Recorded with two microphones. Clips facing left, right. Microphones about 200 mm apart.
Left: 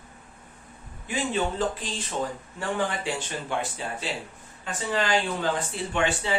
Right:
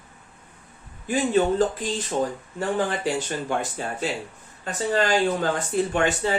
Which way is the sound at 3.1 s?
45° right (ahead or behind).